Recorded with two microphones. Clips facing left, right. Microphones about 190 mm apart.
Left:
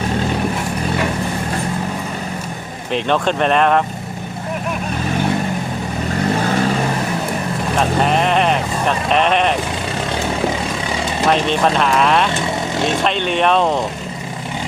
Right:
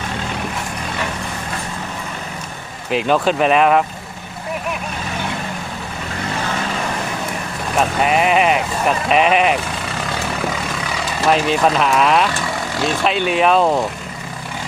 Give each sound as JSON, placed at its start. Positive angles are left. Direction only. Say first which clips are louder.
{"t": 2.9, "sound": "speech", "louder": "right 1 dB", "side_deg": -5}
{"t": 7.8, "sound": "speech", "louder": "right 1 dB", "side_deg": -5}
{"t": 10.1, "sound": "vehicle", "louder": "left 4 dB", "side_deg": 25}
{"t": 11.3, "sound": "speech", "louder": "right 1 dB", "side_deg": -5}
{"t": 12.3, "sound": "vehicle", "louder": "left 3 dB", "side_deg": 20}
{"t": 13.1, "sound": "speech", "louder": "right 3 dB", "side_deg": -5}